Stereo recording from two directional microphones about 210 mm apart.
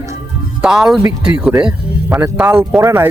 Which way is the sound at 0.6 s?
Centre (ahead or behind).